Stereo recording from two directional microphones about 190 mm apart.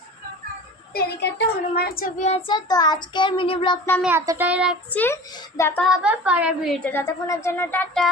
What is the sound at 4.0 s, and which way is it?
Child singing, 10° right (ahead or behind).